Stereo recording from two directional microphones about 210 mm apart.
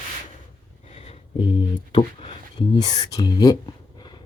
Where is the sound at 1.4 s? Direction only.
25° left (ahead or behind).